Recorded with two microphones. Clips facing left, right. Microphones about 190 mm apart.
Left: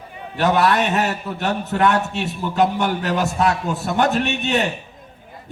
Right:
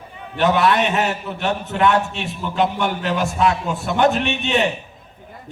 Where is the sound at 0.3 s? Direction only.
40° left (ahead or behind).